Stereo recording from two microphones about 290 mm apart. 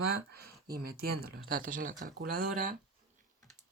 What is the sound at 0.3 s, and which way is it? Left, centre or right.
Speech, right.